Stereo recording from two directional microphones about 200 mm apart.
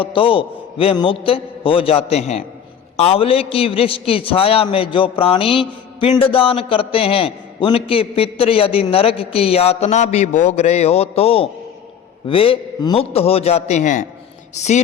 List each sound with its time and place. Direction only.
0.0 s a man's voice: 25° left (ahead or behind)